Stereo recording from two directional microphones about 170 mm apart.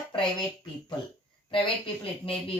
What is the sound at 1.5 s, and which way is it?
Speech, 35° left (ahead or behind).